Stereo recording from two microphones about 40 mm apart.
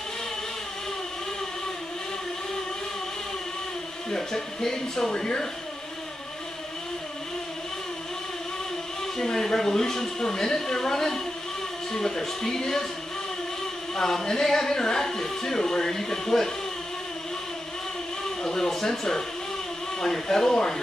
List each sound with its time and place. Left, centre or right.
4.1 s speech: centre
9.2 s speech: centre
13.9 s speech: centre
18.4 s a sound: centre
20.0 s speech: centre